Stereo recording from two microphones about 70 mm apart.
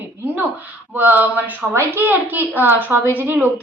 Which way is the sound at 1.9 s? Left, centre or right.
Right.